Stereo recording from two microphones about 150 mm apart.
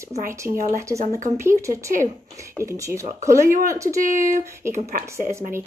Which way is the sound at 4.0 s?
60° right (ahead or behind).